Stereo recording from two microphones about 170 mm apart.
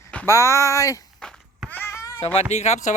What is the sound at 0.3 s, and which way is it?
Speech, 15° left (ahead or behind).